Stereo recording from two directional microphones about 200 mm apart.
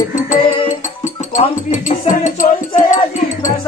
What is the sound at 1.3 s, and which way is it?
Speech, 35° left (ahead or behind).